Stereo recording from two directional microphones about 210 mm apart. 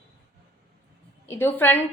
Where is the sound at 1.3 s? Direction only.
10° left (ahead or behind).